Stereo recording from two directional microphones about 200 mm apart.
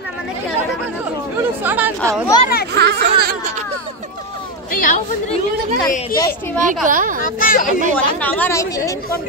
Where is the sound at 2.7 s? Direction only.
55° right (ahead or behind).